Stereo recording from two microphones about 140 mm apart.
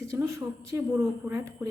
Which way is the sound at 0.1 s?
20° right (ahead or behind).